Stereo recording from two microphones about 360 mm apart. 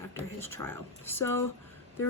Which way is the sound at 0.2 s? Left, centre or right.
Centre.